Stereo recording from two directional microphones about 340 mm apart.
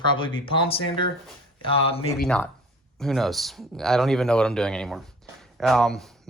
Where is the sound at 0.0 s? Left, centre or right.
Centre.